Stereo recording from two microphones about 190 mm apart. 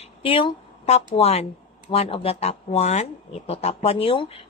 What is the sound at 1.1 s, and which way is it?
A woman's voice, 35° left (ahead or behind).